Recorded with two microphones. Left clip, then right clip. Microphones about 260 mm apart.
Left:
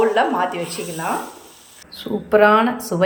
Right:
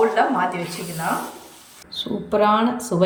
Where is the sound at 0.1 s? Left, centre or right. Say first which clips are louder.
Left 1 dB; centre.